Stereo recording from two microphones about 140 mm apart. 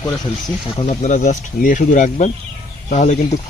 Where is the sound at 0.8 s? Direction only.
55° left (ahead or behind).